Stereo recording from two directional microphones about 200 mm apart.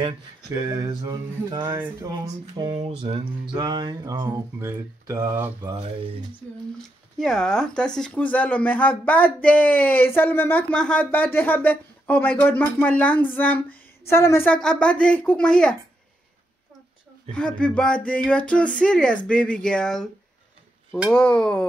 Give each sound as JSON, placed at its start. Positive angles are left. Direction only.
{"t": 0.6, "sound": "a sound", "side_deg": -20}
{"t": 3.0, "sound": "speech", "side_deg": -25}
{"t": 7.2, "sound": "speech", "side_deg": 5}
{"t": 17.6, "sound": "speech", "side_deg": 5}